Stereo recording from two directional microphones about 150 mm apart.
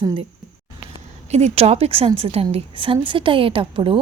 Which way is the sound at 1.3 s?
45° right (ahead or behind).